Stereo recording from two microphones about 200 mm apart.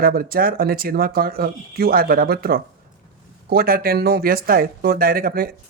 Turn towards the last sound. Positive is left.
turn(degrees=-45)  # may be behind; listen again after turning